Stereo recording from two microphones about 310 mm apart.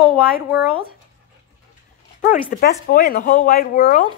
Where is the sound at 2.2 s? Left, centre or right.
Left.